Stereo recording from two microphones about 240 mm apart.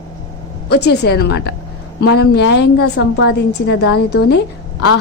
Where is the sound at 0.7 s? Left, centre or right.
Left.